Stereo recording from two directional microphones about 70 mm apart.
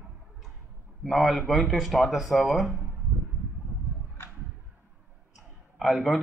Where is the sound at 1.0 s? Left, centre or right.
Centre.